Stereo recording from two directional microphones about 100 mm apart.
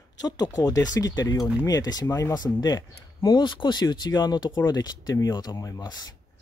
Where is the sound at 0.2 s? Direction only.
40° left (ahead or behind).